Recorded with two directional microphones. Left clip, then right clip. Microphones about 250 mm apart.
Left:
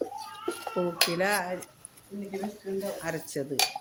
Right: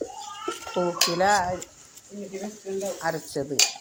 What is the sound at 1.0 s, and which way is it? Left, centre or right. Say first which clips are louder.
Speech: right 6 dB; centre.